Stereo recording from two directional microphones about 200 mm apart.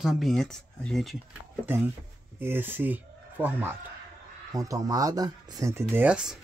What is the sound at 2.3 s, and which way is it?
Speech, 10° right (ahead or behind).